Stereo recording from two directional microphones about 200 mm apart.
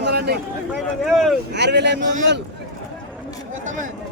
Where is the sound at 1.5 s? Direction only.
60° right (ahead or behind).